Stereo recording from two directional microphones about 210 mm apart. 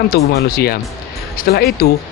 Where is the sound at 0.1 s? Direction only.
45° left (ahead or behind).